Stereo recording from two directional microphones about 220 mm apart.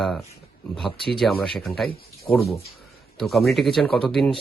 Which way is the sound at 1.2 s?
Centre (ahead or behind).